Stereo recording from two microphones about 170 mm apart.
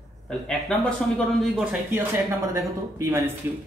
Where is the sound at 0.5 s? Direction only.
5° left (ahead or behind).